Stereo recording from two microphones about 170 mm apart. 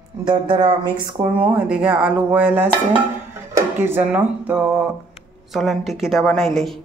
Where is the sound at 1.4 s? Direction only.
10° right (ahead or behind).